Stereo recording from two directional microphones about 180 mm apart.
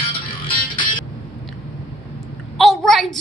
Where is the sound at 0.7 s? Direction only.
25° left (ahead or behind).